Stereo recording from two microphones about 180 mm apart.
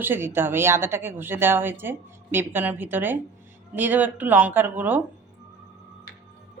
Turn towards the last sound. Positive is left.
turn(degrees=-10)  # may be behind; listen again after turning